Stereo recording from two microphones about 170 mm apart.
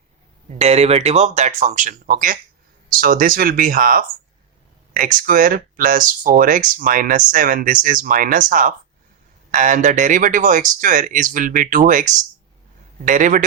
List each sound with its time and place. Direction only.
0.6 s speech: 40° right (ahead or behind)